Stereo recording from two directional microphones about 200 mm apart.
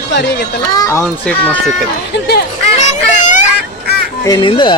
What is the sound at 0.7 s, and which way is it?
Speech, 15° left (ahead or behind).